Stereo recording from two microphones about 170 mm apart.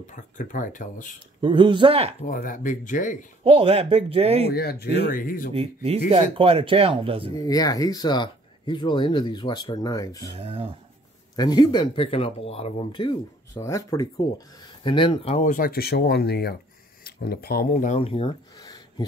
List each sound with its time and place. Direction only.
0.0 s speech: 50° left (ahead or behind)
1.4 s speech: 30° right (ahead or behind)
2.2 s speech: 55° left (ahead or behind)
3.4 s speech: 35° right (ahead or behind)
4.5 s speech: 70° left (ahead or behind)
5.1 s speech: 55° left (ahead or behind)
5.5 s speech: 35° right (ahead or behind)
7.3 s speech: 20° left (ahead or behind)
10.3 s speech: 35° right (ahead or behind)
11.3 s speech: 25° left (ahead or behind)
15.4 s speech: 55° left (ahead or behind); by 18.3 s 35° left (ahead or behind)
18.6 s a sound: 25° left (ahead or behind)